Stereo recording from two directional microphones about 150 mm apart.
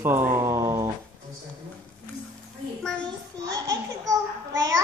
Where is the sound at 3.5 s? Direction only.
25° right (ahead or behind).